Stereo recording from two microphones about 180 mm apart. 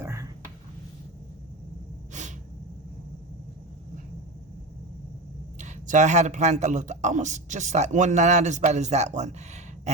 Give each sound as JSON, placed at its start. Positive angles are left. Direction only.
{"t": 0.0, "sound": "a sound", "side_deg": -15}
{"t": 2.1, "sound": "snort", "side_deg": -40}
{"t": 5.5, "sound": "speech", "side_deg": -40}